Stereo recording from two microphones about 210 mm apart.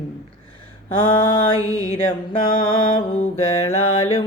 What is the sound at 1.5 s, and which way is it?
Mantra, 15° right (ahead or behind).